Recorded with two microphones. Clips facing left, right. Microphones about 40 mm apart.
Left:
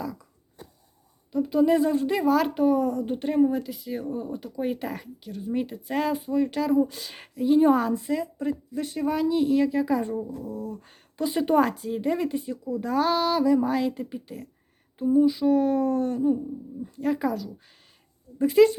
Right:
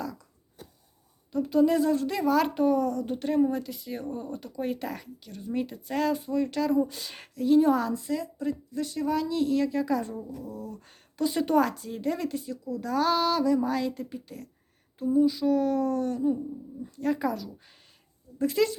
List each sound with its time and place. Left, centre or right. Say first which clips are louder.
0.0 s a sound: left 2 dB; centre
1.3 s speech: left 2 dB; centre
7.6 s a woman's voice: left 3 dB; left
10.1 s a woman's voice: left 7 dB; left
10.4 s speech: left 5 dB; centre
18.3 s a woman's voice: left 7 dB; left